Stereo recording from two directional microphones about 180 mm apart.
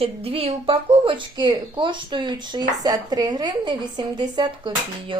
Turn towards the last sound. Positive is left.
turn(degrees=-25)  # may be behind; listen again after turning